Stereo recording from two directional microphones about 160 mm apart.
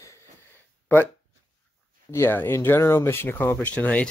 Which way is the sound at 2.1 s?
15° left (ahead or behind).